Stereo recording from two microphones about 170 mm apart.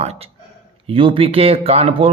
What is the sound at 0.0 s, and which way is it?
Speech, 40° right (ahead or behind).